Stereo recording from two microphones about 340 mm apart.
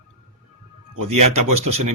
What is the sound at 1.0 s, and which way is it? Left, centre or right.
Speech, centre.